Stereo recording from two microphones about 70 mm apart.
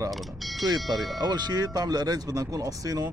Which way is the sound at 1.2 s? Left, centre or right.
Right.